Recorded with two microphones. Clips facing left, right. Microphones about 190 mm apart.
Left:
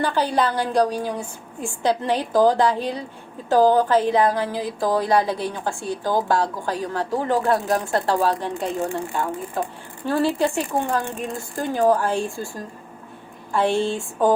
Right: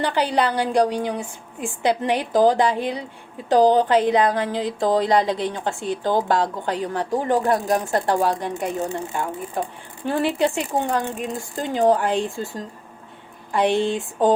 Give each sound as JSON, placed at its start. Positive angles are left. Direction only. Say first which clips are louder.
{"t": 0.0, "sound": "speech", "louder": "even", "side_deg": -15}